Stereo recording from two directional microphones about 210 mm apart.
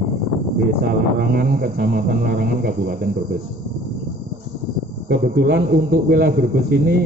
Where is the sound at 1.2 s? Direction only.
45° right (ahead or behind).